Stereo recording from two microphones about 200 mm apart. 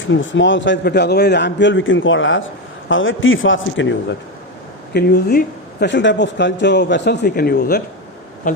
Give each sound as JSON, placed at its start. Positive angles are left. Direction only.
{"t": 0.1, "sound": "a man's voice", "side_deg": 70}
{"t": 4.9, "sound": "a man's voice", "side_deg": 55}
{"t": 8.4, "sound": "speech", "side_deg": 40}